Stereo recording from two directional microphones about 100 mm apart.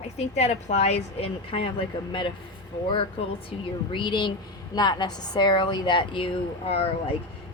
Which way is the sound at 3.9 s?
55° left (ahead or behind).